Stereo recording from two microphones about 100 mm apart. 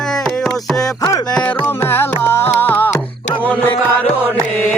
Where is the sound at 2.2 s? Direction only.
25° left (ahead or behind).